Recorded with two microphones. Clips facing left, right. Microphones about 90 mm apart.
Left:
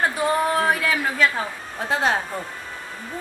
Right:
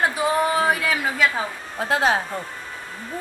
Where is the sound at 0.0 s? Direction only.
5° right (ahead or behind).